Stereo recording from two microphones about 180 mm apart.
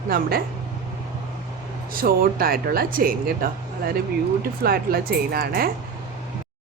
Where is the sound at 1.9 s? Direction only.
55° right (ahead or behind).